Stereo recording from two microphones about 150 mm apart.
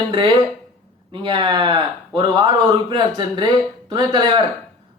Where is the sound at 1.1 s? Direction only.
30° right (ahead or behind).